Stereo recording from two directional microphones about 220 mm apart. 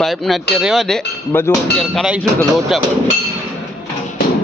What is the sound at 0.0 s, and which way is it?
A man's voice, centre (ahead or behind).